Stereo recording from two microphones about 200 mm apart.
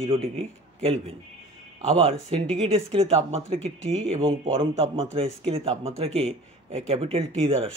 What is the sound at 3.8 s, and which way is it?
Speech, 70° right (ahead or behind).